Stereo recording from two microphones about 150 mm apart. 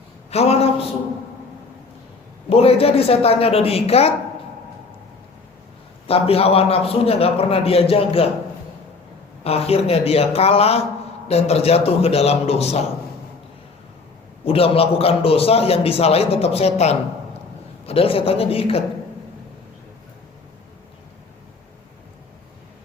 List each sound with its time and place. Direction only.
0.3 s a man's voice: 45° left (ahead or behind)
2.5 s a man's voice: 40° left (ahead or behind)
6.1 s a man's voice: 40° left (ahead or behind)
9.4 s a man's voice: 40° left (ahead or behind)
14.4 s a man's voice: 40° left (ahead or behind)